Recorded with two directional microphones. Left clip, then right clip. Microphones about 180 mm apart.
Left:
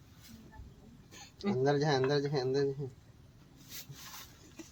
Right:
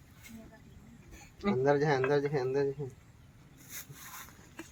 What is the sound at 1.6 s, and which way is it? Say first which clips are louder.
Speech: right 2 dB; 50° left (ahead or behind).